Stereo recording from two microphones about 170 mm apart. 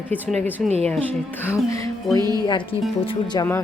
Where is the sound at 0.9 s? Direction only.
10° left (ahead or behind).